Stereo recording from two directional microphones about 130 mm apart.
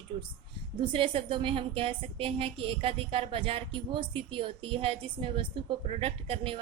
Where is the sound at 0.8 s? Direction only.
45° right (ahead or behind).